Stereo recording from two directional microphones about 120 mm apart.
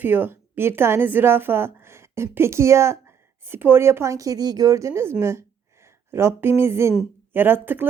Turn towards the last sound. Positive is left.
turn(degrees=-15)  # may be behind; listen again after turning